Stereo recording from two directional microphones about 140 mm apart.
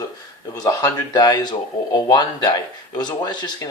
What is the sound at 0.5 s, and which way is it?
Speech, 25° left (ahead or behind).